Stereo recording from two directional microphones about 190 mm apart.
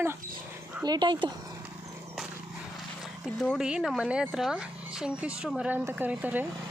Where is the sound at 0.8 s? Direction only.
25° right (ahead or behind).